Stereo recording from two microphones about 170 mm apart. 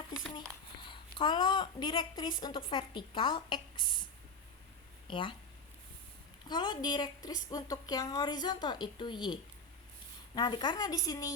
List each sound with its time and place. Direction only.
0.3 s a child's voice: 25° left (ahead or behind)
5.0 s speech: 30° left (ahead or behind)
6.5 s a woman's voice: 25° left (ahead or behind)